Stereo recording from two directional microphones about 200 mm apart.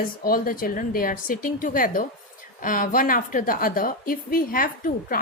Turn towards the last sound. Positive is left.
turn(degrees=45)  # may be behind; listen again after turning